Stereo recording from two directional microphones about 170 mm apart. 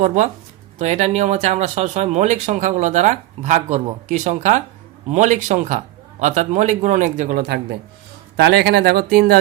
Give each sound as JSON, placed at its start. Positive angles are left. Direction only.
{"t": 0.0, "sound": "speech", "side_deg": -50}
{"t": 8.4, "sound": "speech", "side_deg": -80}